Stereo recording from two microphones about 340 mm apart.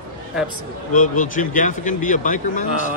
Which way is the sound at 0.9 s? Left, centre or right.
Left.